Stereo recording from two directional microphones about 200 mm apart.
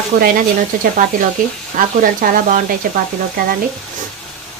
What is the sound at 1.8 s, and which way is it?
Speech, 40° right (ahead or behind).